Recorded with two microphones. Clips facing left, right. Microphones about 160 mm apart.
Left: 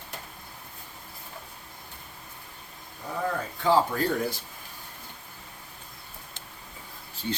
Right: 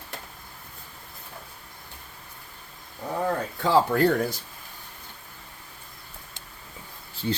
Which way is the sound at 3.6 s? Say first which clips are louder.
Right 3 dB; 80° right.